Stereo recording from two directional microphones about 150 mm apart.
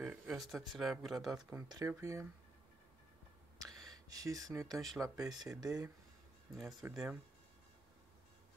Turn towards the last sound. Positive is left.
turn(degrees=-15)  # may be behind; listen again after turning